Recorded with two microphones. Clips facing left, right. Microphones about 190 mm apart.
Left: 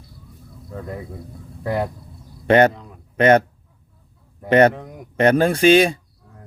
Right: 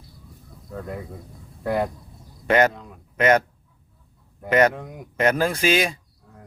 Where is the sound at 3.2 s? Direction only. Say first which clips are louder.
Left 4 dB; 30° left (ahead or behind).